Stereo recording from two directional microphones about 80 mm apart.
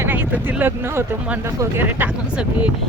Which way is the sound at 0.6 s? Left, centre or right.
Right.